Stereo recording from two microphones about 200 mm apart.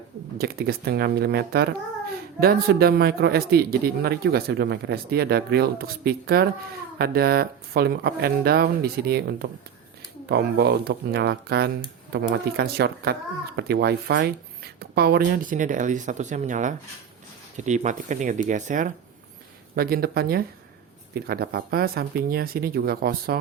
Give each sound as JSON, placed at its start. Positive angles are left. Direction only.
{"t": 0.3, "sound": "speech", "side_deg": -50}